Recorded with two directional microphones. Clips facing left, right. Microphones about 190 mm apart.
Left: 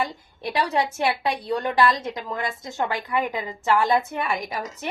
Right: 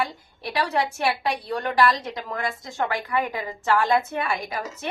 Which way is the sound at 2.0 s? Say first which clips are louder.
Left 1 dB; 25° left (ahead or behind).